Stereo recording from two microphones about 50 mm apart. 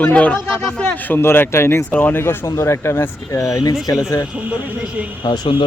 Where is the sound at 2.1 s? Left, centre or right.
Left.